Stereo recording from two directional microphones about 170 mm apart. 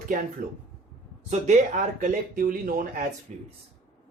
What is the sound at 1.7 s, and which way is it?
Speech, 50° right (ahead or behind).